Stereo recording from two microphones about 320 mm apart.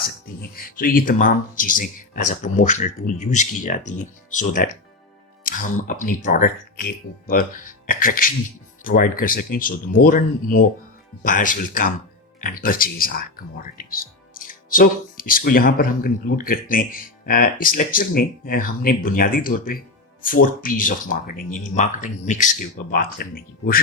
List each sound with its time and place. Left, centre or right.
0.5 s speech: left